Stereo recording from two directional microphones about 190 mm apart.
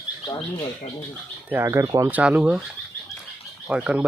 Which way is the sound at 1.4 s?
15° right (ahead or behind).